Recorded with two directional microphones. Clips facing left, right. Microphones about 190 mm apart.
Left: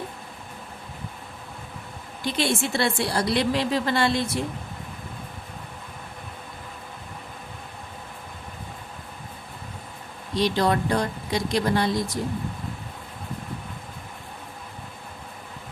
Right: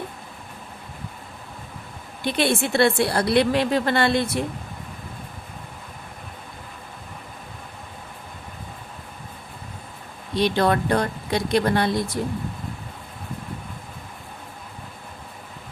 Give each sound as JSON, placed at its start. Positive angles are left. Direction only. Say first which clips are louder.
{"t": 2.2, "sound": "a woman's voice", "louder": "right 3 dB", "side_deg": -60}
{"t": 10.3, "sound": "a woman's voice", "louder": "right 2 dB", "side_deg": -60}